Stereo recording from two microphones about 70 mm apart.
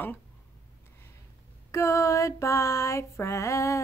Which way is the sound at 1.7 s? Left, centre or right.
Left.